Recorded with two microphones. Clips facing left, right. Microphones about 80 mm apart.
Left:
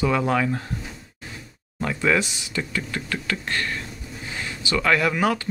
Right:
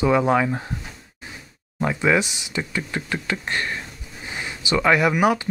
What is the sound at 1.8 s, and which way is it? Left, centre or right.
Speech, centre.